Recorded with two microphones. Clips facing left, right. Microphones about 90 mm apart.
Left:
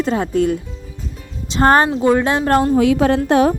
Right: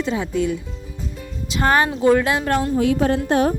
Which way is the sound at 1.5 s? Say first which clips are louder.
Left 5 dB; 35° left (ahead or behind).